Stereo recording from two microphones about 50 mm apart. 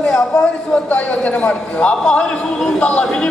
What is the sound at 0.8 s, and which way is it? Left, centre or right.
A man's voice, left.